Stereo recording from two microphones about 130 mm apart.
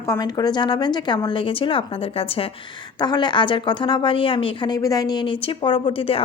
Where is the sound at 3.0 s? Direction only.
35° left (ahead or behind).